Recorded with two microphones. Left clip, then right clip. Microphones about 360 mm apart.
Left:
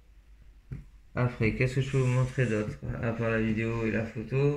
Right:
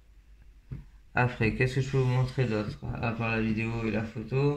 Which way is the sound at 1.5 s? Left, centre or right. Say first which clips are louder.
Right 1 dB; centre.